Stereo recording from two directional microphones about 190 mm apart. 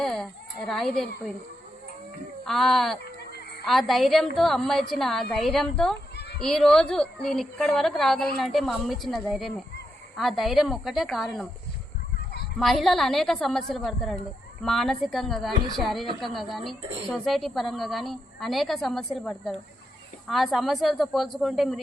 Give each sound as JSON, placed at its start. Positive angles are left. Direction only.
{"t": 0.0, "sound": "a woman's voice", "side_deg": 0}
{"t": 2.4, "sound": "speech", "side_deg": 0}
{"t": 6.1, "sound": "a sound", "side_deg": 60}
{"t": 6.4, "sound": "speech", "side_deg": 5}
{"t": 12.1, "sound": "honk", "side_deg": 60}
{"t": 12.5, "sound": "speech", "side_deg": 0}